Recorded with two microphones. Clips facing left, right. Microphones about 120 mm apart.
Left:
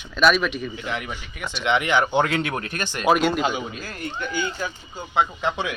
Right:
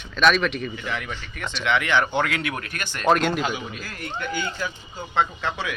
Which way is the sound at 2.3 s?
30° left (ahead or behind).